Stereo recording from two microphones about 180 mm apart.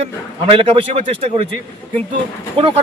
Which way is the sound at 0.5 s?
30° right (ahead or behind).